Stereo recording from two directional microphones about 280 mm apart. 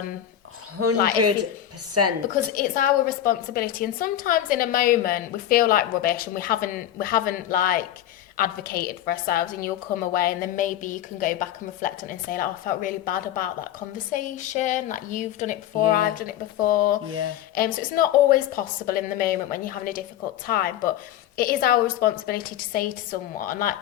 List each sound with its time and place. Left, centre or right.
0.8 s speech: right
2.0 s a woman's voice: right
2.5 s a woman's voice: left
17.1 s speech: right
17.5 s a woman's voice: left
21.3 s a woman's voice: left